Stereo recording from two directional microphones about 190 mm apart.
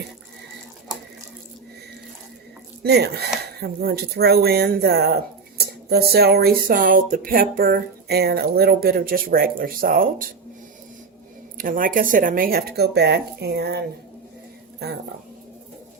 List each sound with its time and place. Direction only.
2.8 s speech: 60° right (ahead or behind)
11.5 s speech: 45° right (ahead or behind)